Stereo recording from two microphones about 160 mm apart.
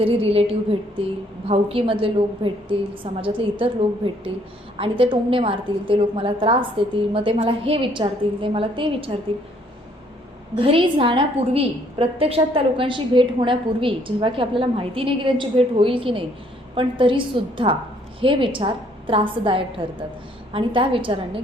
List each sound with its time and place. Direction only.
0.0 s a woman's voice: 35° right (ahead or behind)
4.8 s a woman's voice: 35° right (ahead or behind)
10.5 s a woman's voice: 35° right (ahead or behind)